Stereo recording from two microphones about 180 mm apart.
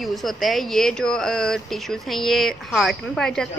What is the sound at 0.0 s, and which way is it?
A woman's voice, centre (ahead or behind).